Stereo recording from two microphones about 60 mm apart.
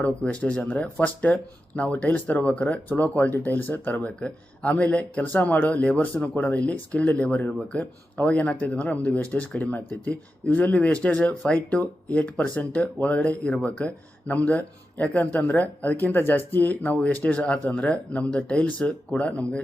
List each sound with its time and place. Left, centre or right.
0.0 s speech: left